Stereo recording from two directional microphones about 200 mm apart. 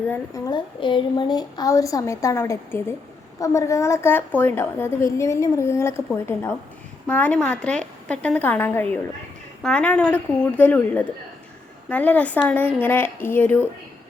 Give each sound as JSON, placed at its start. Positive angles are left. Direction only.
{"t": 0.1, "sound": "a woman's voice", "side_deg": 15}